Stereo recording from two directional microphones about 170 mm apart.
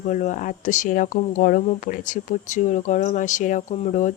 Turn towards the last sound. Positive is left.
turn(degrees=45)  # may be behind; listen again after turning